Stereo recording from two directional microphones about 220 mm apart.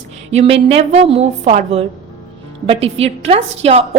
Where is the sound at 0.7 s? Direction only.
25° right (ahead or behind).